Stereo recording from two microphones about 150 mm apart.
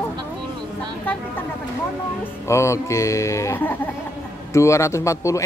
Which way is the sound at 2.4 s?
20° left (ahead or behind).